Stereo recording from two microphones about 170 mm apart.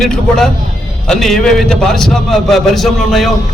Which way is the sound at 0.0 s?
5° left (ahead or behind).